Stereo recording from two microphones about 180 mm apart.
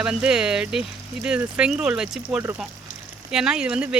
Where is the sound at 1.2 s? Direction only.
5° right (ahead or behind).